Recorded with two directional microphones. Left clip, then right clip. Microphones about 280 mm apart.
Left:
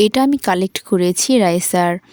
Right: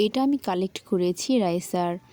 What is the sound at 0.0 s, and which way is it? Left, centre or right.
A woman's voice, left.